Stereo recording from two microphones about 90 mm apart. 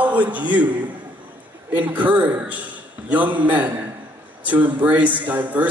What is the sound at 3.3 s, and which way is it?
A man's voice, 15° right (ahead or behind).